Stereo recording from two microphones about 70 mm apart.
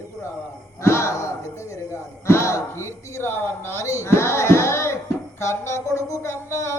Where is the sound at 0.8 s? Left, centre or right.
Left.